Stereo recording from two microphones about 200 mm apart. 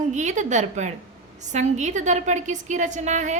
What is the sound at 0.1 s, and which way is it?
A woman's voice, 35° right (ahead or behind).